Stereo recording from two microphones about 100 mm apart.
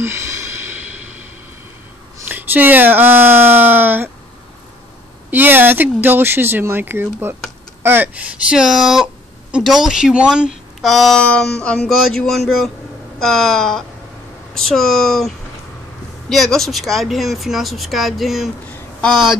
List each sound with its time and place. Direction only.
0.0 s a sound: 25° right (ahead or behind)
2.2 s speech: 20° right (ahead or behind)
5.3 s speech: 20° right (ahead or behind); by 19.2 s 5° left (ahead or behind)